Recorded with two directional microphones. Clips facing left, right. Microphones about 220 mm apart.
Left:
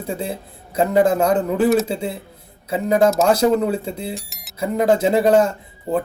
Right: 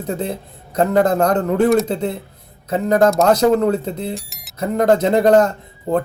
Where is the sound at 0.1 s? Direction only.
10° left (ahead or behind).